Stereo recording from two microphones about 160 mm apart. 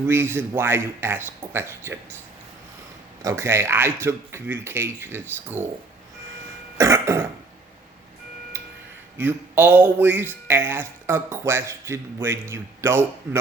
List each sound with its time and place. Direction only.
0.1 s speech: 15° right (ahead or behind)
3.2 s speech: 15° right (ahead or behind)
6.7 s cough: 20° right (ahead or behind)
8.5 s tick-tock: 15° right (ahead or behind)
9.1 s speech: 15° right (ahead or behind)